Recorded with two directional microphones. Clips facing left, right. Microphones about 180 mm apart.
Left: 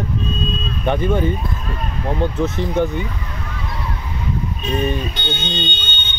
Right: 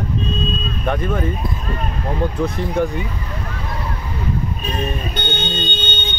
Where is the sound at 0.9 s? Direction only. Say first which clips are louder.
Left 3 dB; 5° left (ahead or behind).